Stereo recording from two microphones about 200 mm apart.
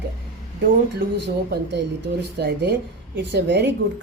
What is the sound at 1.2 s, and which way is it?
Speech, 60° right (ahead or behind).